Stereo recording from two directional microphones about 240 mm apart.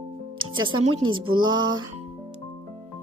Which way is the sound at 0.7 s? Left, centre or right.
Right.